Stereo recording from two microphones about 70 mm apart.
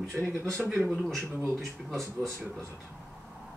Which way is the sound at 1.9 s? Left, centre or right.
Right.